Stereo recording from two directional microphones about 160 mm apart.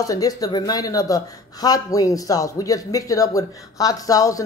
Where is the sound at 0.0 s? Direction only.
20° left (ahead or behind).